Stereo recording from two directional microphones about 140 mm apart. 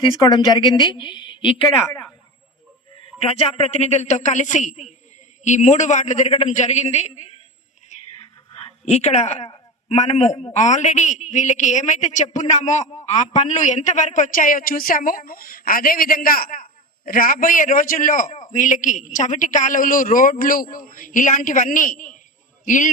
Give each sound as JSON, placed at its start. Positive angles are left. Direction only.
{"t": 0.0, "sound": "a woman's voice", "side_deg": 30}
{"t": 1.6, "sound": "a woman's voice", "side_deg": 20}
{"t": 3.2, "sound": "a man's voice", "side_deg": 45}
{"t": 8.8, "sound": "a man's voice", "side_deg": 50}